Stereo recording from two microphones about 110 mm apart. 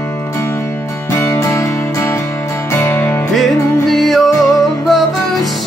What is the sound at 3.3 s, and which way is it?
Music, centre (ahead or behind).